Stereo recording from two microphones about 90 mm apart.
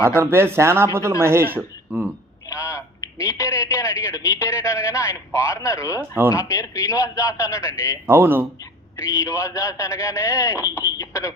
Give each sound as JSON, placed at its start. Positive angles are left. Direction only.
{"t": 0.2, "sound": "speech", "side_deg": -25}
{"t": 2.5, "sound": "a man's voice", "side_deg": 35}
{"t": 8.0, "sound": "speech", "side_deg": -25}
{"t": 9.1, "sound": "a man's voice", "side_deg": 35}